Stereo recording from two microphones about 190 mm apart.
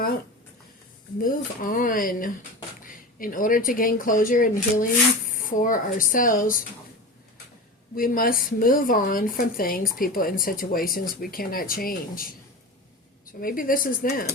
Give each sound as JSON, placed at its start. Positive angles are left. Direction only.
{"t": 1.2, "sound": "speech", "side_deg": 45}
{"t": 7.9, "sound": "speech", "side_deg": 50}
{"t": 13.4, "sound": "speech", "side_deg": 50}